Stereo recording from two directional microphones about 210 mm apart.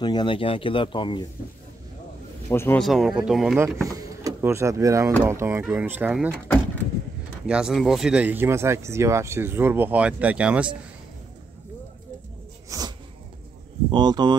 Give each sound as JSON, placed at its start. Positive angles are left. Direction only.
{"t": 0.0, "sound": "speech", "side_deg": 20}
{"t": 2.5, "sound": "speech", "side_deg": 10}
{"t": 2.9, "sound": "speech", "side_deg": 0}
{"t": 3.9, "sound": "speech", "side_deg": -15}
{"t": 7.4, "sound": "speech", "side_deg": -5}
{"t": 12.6, "sound": "a sound", "side_deg": -15}
{"t": 13.8, "sound": "speech", "side_deg": -20}